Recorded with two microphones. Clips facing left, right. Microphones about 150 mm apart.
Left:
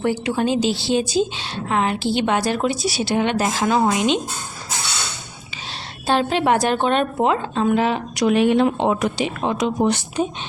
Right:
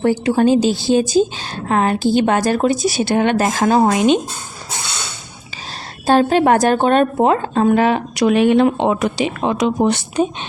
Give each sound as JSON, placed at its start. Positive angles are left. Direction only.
{"t": 0.0, "sound": "a woman's voice", "side_deg": -45}
{"t": 6.1, "sound": "a woman's voice", "side_deg": -45}